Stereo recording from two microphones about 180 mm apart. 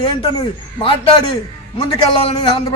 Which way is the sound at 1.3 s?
25° left (ahead or behind).